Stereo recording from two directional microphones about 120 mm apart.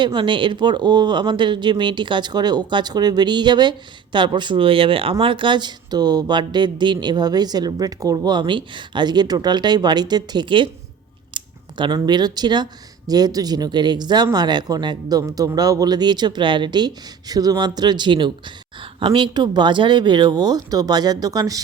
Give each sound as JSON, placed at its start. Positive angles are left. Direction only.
{"t": 0.0, "sound": "speech", "side_deg": -40}
{"t": 11.3, "sound": "scissors", "side_deg": -40}
{"t": 11.9, "sound": "speech", "side_deg": -35}